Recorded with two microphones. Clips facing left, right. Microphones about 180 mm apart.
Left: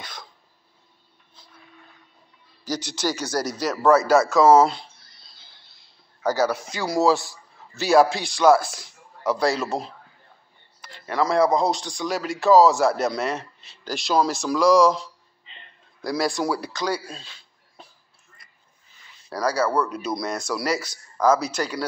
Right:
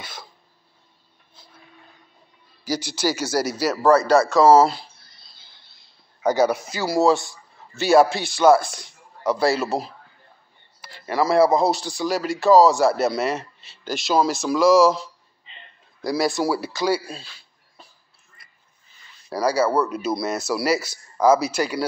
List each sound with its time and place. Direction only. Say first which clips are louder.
0.0 s cough: right 1 dB; 5° right (ahead or behind)
2.6 s speech: right 3 dB; 5° right (ahead or behind)
6.2 s speech: right 3 dB; 15° right (ahead or behind)
6.7 s a man's voice: right 2 dB; 5° right (ahead or behind)
19.2 s speech: right 3 dB; 10° right (ahead or behind)